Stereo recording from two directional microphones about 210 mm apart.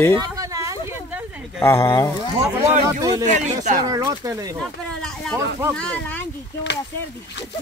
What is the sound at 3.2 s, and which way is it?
Speech, 35° right (ahead or behind).